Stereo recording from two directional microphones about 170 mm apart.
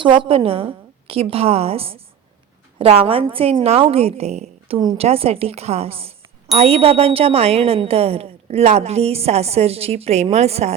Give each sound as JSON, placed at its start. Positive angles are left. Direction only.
{"t": 0.0, "sound": "a woman's voice", "side_deg": -30}